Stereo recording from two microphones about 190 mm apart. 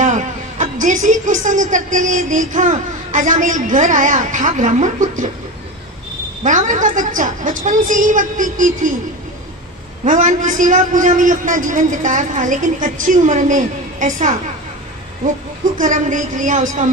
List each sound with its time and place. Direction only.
0.0 s a woman's voice: 40° right (ahead or behind)
6.4 s a woman's voice: 40° right (ahead or behind)
10.0 s a woman's voice: 40° right (ahead or behind)
15.8 s a woman's voice: 40° right (ahead or behind)